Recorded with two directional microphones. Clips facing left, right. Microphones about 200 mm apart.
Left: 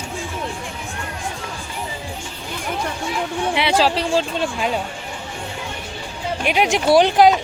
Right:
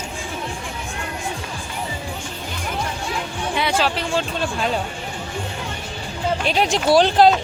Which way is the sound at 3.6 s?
35° left (ahead or behind).